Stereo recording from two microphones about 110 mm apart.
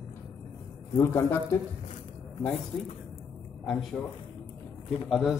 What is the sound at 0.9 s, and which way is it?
Speech, 20° left (ahead or behind).